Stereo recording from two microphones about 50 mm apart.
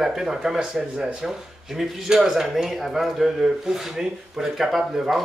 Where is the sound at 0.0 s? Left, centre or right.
Centre.